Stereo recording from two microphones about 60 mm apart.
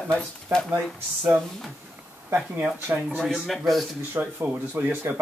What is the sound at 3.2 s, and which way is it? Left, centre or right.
Speech, centre.